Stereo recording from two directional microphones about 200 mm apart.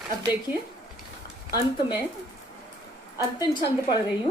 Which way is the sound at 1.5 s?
20° left (ahead or behind).